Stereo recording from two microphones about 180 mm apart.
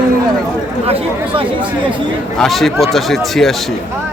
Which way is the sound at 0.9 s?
30° right (ahead or behind).